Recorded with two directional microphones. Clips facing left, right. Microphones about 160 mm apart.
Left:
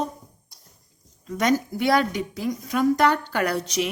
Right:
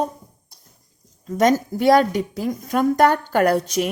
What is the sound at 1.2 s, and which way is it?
A woman's voice, 40° right (ahead or behind).